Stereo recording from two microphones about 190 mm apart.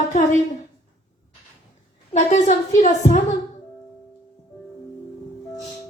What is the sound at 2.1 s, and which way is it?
A woman's voice, 35° left (ahead or behind).